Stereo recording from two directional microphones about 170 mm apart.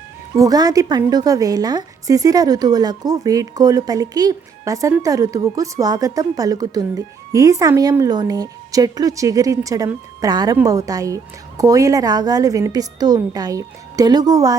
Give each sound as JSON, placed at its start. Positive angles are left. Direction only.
{"t": 0.3, "sound": "a woman's voice", "side_deg": -20}